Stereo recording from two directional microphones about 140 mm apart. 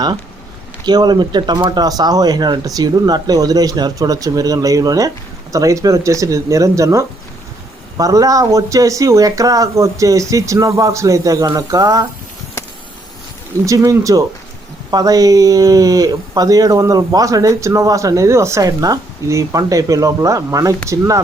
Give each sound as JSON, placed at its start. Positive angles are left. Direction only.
{"t": 0.9, "sound": "speech", "side_deg": -30}
{"t": 13.7, "sound": "speech", "side_deg": -20}